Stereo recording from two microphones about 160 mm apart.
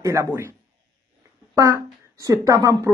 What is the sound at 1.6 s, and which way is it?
Speech, 15° right (ahead or behind).